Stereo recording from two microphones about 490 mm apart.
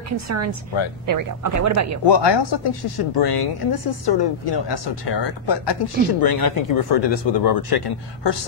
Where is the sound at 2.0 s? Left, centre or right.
Left.